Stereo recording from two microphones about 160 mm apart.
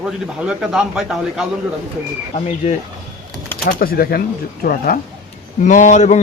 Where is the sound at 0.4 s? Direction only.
5° right (ahead or behind).